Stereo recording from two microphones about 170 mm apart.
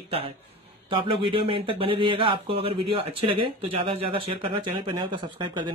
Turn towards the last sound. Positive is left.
turn(degrees=-25)  # may be behind; listen again after turning